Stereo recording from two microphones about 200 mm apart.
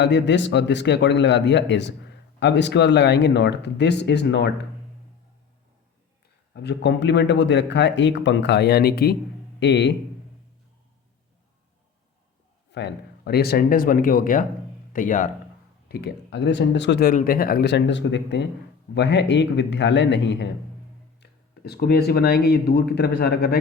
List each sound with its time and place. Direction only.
0.0 s a man's voice: 60° left (ahead or behind)
6.5 s a man's voice: 60° left (ahead or behind)
12.7 s speech: 55° left (ahead or behind)
15.9 s a man's voice: 55° left (ahead or behind)